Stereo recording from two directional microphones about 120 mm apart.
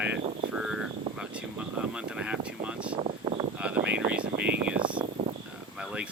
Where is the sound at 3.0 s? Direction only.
55° right (ahead or behind).